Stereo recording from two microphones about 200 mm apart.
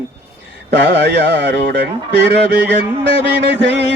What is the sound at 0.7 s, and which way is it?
Music, 60° right (ahead or behind).